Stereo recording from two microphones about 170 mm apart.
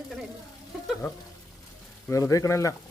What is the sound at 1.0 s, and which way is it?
A woman's voice, 15° left (ahead or behind).